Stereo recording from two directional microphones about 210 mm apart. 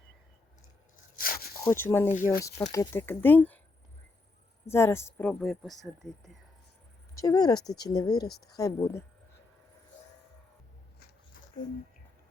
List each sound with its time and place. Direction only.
1.1 s a sound: 45° left (ahead or behind)
1.5 s speech: 10° left (ahead or behind)
4.6 s speech: 10° left (ahead or behind)
7.2 s speech: 20° left (ahead or behind)